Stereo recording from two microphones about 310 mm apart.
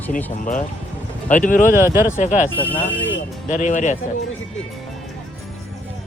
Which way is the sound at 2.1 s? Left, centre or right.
Left.